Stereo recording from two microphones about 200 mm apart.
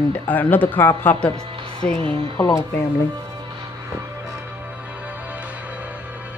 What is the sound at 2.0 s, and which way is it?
Speech, 25° right (ahead or behind).